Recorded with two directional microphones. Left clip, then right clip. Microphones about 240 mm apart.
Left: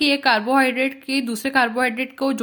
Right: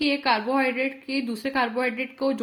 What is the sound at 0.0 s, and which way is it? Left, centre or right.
A woman's voice, left.